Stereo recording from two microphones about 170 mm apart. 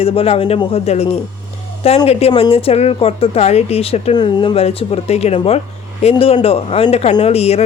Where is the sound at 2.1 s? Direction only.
35° left (ahead or behind).